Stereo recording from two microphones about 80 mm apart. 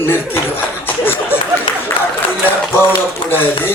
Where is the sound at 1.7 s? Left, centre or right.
Left.